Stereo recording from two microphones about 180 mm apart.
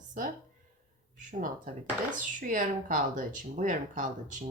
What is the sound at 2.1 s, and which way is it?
A woman's voice, 45° right (ahead or behind).